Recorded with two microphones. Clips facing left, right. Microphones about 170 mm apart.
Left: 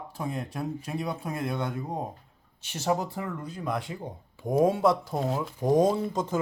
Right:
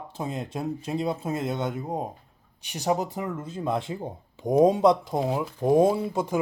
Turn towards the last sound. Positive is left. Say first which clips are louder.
# right 2 dB
turn(degrees=-10)  # may be behind; listen again after turning